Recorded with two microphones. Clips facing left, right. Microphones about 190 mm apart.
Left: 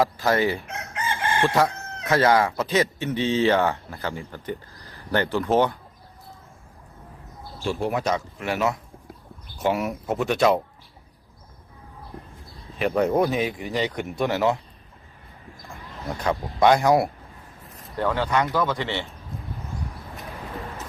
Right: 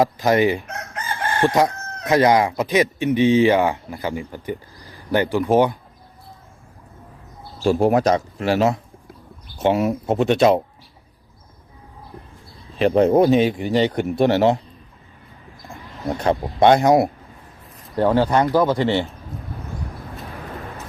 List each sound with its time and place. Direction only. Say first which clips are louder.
0.0 s speech: right 4 dB; 20° right (ahead or behind)
7.6 s speech: right 9 dB; 45° right (ahead or behind); by 10.6 s 25° right (ahead or behind)
12.8 s speech: right 6 dB; 30° right (ahead or behind)
16.0 s speech: right 6 dB; 30° right (ahead or behind)
17.9 s speech: right 6 dB; 35° right (ahead or behind)